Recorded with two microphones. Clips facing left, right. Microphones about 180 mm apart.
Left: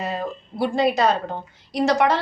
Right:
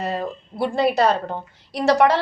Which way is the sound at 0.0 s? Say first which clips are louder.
Right 1 dB; 60° right (ahead or behind).